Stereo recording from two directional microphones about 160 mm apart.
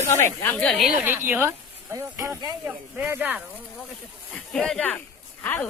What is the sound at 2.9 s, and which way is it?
Speech, 10° right (ahead or behind).